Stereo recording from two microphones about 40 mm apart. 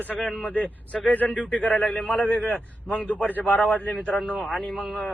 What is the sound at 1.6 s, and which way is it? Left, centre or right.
Speech, left.